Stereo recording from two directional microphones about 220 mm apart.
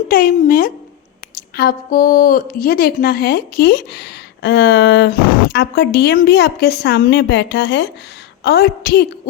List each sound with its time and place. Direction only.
0.1 s a woman's voice: 40° left (ahead or behind)